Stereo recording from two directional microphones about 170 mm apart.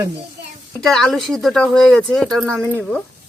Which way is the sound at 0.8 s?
Centre (ahead or behind).